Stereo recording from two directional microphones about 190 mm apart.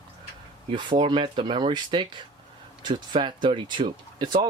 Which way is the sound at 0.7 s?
25° right (ahead or behind).